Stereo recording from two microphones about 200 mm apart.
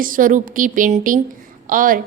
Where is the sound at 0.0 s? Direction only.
40° right (ahead or behind).